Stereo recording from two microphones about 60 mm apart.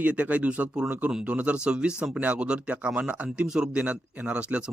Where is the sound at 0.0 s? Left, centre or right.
Right.